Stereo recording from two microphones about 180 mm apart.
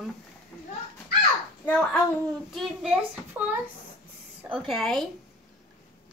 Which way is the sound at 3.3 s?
10° right (ahead or behind).